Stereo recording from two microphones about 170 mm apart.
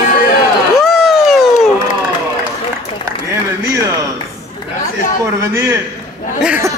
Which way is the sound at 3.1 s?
15° right (ahead or behind).